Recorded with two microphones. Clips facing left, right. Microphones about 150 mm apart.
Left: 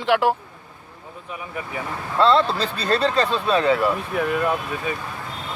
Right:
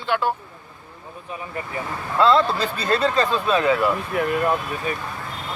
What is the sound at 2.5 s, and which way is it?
Speech, 10° right (ahead or behind).